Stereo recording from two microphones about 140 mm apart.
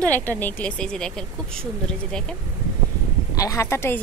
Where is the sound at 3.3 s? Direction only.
20° left (ahead or behind).